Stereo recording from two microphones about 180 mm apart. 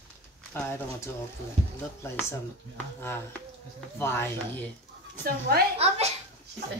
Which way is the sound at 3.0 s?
10° left (ahead or behind).